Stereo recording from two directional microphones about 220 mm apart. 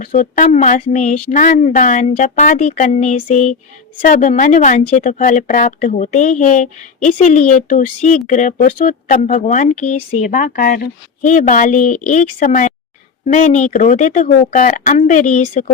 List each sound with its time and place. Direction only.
0.0 s speech: 35° left (ahead or behind)